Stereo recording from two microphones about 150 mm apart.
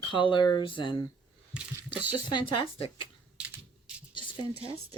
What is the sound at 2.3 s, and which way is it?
Speech, 30° left (ahead or behind).